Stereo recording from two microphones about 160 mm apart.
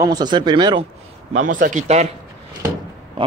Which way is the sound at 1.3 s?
55° right (ahead or behind).